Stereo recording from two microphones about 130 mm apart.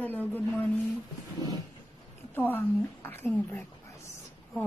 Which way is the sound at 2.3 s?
15° left (ahead or behind).